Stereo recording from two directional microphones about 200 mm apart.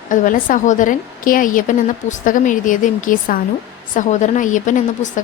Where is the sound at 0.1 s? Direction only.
40° left (ahead or behind).